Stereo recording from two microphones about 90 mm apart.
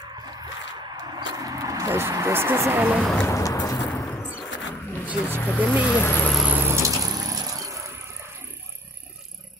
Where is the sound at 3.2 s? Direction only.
35° left (ahead or behind).